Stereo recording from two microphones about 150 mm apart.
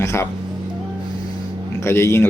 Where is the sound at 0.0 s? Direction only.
20° left (ahead or behind).